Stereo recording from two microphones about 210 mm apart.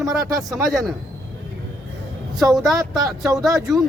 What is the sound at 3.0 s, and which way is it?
Speech, 15° right (ahead or behind).